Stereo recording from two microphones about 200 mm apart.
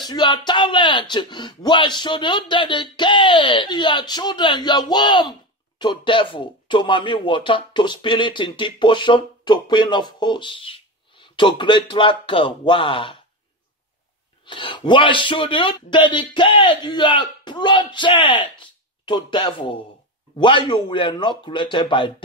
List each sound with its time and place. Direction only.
0.1 s speech: 20° left (ahead or behind)
14.4 s speech: 25° left (ahead or behind)